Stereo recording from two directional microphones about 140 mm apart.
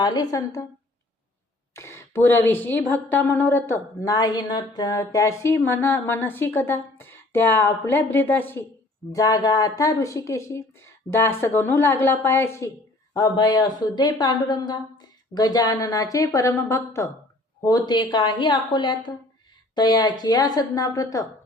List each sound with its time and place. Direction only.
0.0 s speech: 30° left (ahead or behind)
1.7 s speech: 20° left (ahead or behind)
4.0 s speech: 25° left (ahead or behind)
9.1 s speech: 25° left (ahead or behind)
13.1 s a woman's voice: 30° left (ahead or behind)